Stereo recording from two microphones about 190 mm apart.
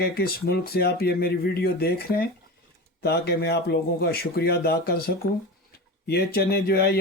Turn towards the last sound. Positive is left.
turn(degrees=55)  # may be behind; listen again after turning